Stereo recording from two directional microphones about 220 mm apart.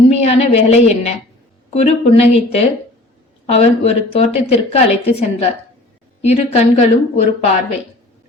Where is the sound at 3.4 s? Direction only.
30° left (ahead or behind).